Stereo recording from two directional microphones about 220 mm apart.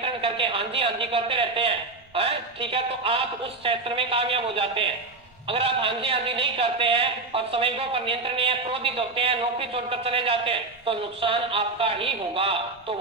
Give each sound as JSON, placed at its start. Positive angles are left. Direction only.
{"t": 0.0, "sound": "a man's voice", "side_deg": -25}